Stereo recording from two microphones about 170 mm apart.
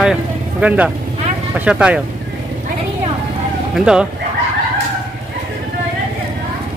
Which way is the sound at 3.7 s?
5° right (ahead or behind).